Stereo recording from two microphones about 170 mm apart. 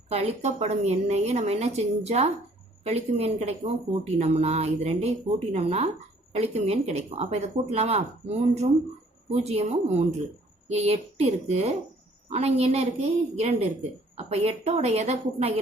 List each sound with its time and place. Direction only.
0.1 s a woman's voice: 40° right (ahead or behind)